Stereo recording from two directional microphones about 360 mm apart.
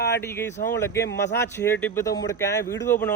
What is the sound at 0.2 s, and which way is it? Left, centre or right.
A man's voice, centre.